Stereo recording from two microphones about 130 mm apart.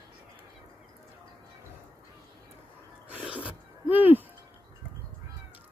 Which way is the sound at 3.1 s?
10° right (ahead or behind).